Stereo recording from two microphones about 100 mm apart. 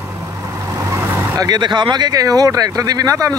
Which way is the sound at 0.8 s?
30° right (ahead or behind).